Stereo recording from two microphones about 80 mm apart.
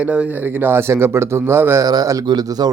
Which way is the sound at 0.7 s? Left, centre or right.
Right.